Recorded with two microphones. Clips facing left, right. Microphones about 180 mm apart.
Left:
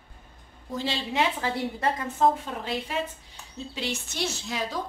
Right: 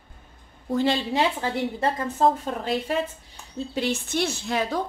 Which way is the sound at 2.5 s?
50° right (ahead or behind).